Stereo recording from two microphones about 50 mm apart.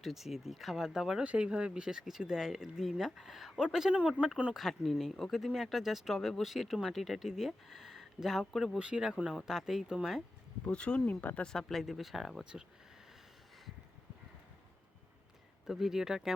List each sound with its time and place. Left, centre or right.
0.0 s speech: centre
1.2 s speech: right; by 3.9 s centre
3.9 s speech: right
4.5 s speech: centre
8.8 s speech: centre
9.3 s speech: centre
10.7 s speech: left
11.0 s speech: left
11.4 s speech: centre
15.6 s speech: centre